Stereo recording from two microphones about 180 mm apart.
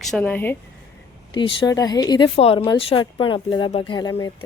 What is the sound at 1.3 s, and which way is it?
Speech, 25° left (ahead or behind).